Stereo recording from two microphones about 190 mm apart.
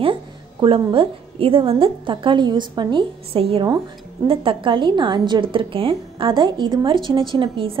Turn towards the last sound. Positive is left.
turn(degrees=-25)  # may be behind; listen again after turning